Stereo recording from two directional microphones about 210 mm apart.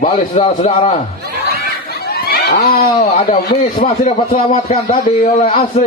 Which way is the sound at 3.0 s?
30° left (ahead or behind).